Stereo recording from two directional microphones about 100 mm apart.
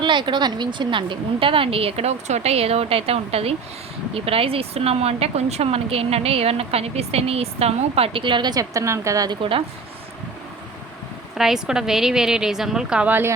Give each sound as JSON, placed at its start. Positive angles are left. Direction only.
{"t": 0.0, "sound": "a woman's voice", "side_deg": -50}
{"t": 9.4, "sound": "a woman's voice", "side_deg": -65}
{"t": 11.3, "sound": "a woman's voice", "side_deg": -5}